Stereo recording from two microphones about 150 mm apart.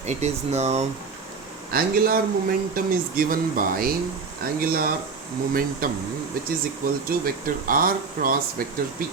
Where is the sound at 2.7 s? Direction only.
75° right (ahead or behind).